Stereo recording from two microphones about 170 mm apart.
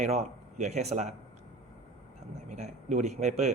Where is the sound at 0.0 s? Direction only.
45° right (ahead or behind).